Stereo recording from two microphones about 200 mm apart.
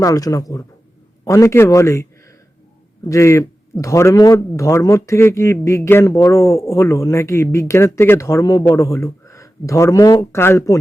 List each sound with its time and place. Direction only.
0.0 s a man's voice: 15° left (ahead or behind)